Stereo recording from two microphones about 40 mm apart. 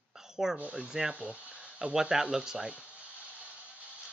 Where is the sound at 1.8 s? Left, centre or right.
Centre.